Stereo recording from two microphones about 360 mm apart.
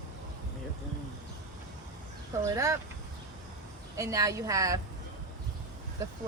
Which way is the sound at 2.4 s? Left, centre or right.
Centre.